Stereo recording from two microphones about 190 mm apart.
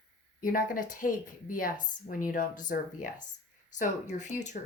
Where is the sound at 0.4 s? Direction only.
45° left (ahead or behind).